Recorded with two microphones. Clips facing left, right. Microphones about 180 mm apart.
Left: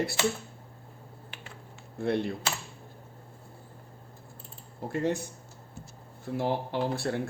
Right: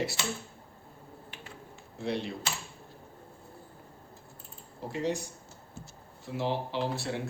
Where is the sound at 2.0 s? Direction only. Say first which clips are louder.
Left 5 dB; 55° left (ahead or behind).